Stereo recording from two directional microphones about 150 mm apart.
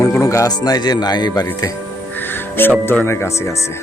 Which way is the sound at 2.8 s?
15° left (ahead or behind).